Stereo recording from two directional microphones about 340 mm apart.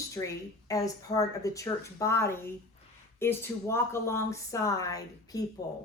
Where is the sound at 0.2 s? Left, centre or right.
Centre.